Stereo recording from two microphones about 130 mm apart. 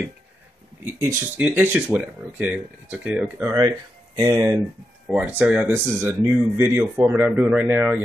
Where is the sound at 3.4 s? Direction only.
20° right (ahead or behind).